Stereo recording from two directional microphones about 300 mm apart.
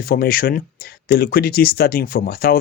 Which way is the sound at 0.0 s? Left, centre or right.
Left.